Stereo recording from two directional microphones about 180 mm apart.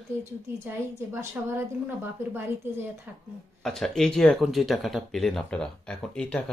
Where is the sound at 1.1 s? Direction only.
10° right (ahead or behind).